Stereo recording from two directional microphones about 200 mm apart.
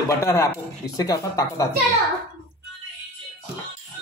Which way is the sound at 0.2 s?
15° left (ahead or behind).